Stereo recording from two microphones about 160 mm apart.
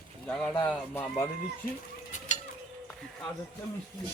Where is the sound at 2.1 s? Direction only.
50° left (ahead or behind).